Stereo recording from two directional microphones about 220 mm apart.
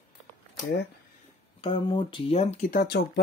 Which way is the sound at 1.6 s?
20° left (ahead or behind).